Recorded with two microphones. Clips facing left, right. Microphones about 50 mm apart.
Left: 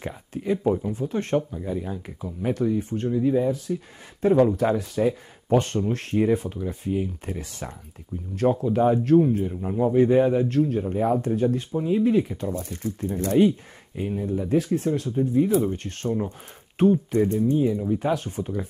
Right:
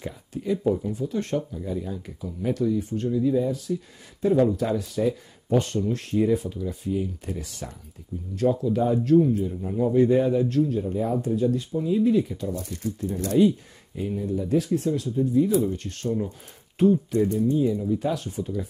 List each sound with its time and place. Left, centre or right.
0.0 s speech: left
9.7 s speech: left